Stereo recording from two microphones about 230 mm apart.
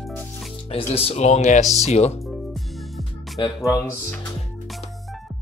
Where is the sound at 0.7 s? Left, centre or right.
Left.